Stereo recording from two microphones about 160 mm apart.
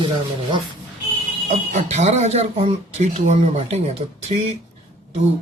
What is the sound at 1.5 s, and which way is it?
Speech, 45° right (ahead or behind).